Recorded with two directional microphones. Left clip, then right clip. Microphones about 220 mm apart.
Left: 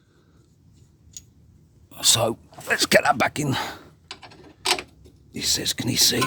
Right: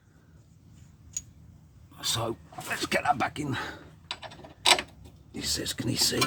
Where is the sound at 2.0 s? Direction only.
50° left (ahead or behind).